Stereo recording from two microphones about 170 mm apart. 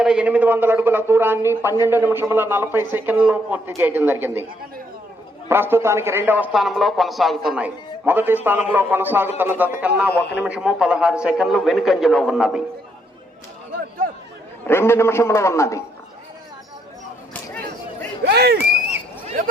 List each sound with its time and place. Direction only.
0.0 s a man's voice: 5° right (ahead or behind)
5.5 s a man's voice: 15° right (ahead or behind)
14.7 s a man's voice: 15° left (ahead or behind)
18.3 s speech: 75° right (ahead or behind)